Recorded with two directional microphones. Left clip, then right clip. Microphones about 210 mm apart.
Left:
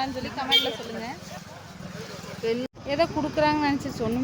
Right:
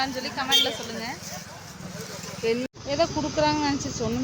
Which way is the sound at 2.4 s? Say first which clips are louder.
Right 1 dB; centre (ahead or behind).